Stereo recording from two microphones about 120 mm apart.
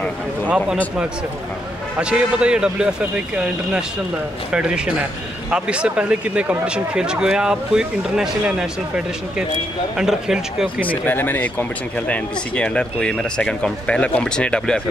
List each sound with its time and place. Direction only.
2.0 s speech: 10° right (ahead or behind)
10.8 s speech: 15° left (ahead or behind)